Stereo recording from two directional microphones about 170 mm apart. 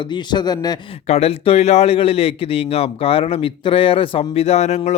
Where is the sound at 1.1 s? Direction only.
35° left (ahead or behind).